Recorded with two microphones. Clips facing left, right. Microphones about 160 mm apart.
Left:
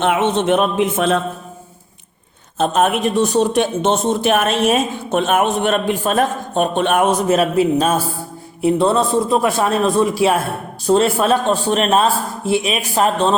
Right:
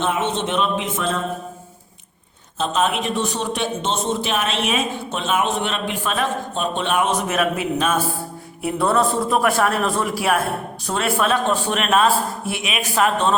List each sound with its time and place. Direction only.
0.0 s speech: 65° left (ahead or behind)
2.6 s a man's voice: 55° left (ahead or behind)
7.3 s a man's voice: 30° left (ahead or behind)